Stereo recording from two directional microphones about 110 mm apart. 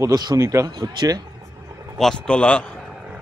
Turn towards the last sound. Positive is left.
turn(degrees=0)  # may be behind; listen again after turning